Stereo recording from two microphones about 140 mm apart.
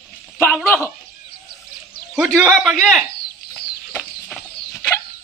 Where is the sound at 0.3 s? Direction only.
15° left (ahead or behind).